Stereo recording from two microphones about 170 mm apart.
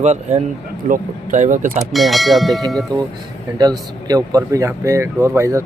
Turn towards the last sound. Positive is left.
turn(degrees=-15)  # may be behind; listen again after turning